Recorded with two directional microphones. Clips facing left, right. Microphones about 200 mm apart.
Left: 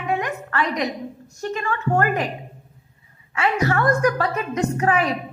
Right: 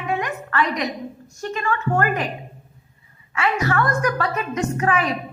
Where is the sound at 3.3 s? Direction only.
30° left (ahead or behind).